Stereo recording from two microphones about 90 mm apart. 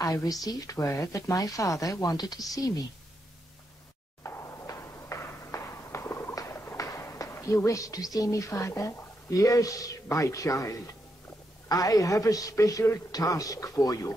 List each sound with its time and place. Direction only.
0.0 s speech: 40° left (ahead or behind)
4.2 s a sound: 30° left (ahead or behind)
6.9 s speech: 35° left (ahead or behind)